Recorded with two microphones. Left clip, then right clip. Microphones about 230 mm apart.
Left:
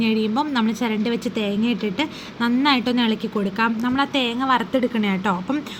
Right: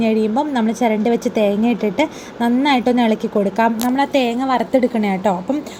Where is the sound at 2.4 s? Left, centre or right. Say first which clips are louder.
Right 3 dB; centre.